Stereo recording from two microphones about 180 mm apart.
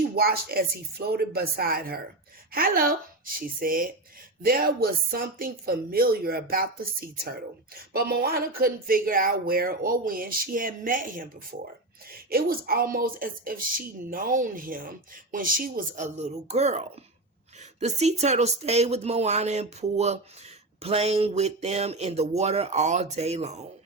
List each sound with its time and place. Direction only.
0.0 s a woman's voice: 55° right (ahead or behind)
12.3 s a woman's voice: 55° right (ahead or behind); by 23.6 s 35° right (ahead or behind)